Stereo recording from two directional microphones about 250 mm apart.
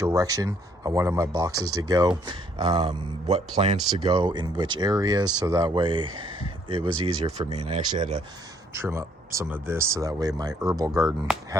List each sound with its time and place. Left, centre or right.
0.0 s speech: centre
11.3 s speech: centre